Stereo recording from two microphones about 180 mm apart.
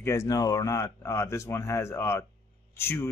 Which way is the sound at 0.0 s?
15° left (ahead or behind).